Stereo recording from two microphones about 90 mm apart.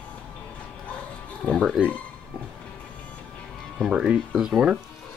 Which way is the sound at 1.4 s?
5° left (ahead or behind).